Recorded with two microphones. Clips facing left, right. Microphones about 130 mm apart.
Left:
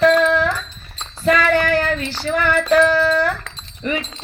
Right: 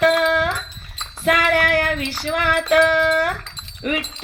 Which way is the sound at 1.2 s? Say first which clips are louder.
Left 2 dB; 10° right (ahead or behind).